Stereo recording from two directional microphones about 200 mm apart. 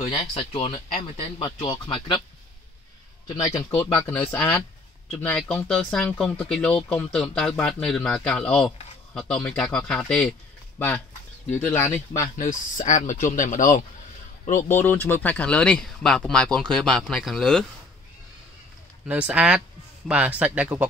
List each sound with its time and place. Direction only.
0.0 s speech: 25° left (ahead or behind)
3.3 s speech: 20° left (ahead or behind); by 10.3 s 5° left (ahead or behind)
11.4 s speech: 10° left (ahead or behind)
12.1 s speech: 40° left (ahead or behind)
14.7 s speech: 10° left (ahead or behind)
19.0 s speech: 5° right (ahead or behind)